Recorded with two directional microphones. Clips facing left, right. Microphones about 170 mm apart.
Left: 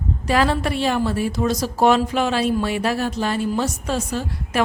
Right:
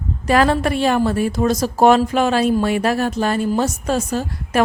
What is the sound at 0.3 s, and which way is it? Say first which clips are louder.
A woman's voice: right 4 dB; 50° right (ahead or behind).